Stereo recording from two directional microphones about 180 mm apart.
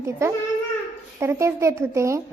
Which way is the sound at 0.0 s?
15° right (ahead or behind).